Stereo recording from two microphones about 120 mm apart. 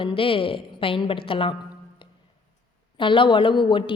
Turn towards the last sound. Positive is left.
turn(degrees=45)  # may be behind; listen again after turning